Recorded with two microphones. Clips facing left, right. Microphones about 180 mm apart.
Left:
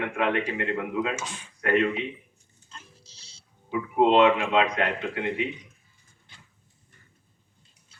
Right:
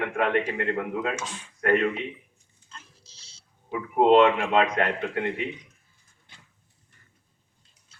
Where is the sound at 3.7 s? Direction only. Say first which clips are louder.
Right 2 dB; 45° right (ahead or behind).